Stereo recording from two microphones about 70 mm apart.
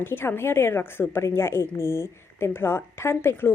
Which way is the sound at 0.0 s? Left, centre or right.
Left.